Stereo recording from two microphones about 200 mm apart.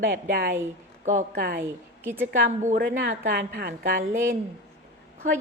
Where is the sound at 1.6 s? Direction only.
10° right (ahead or behind).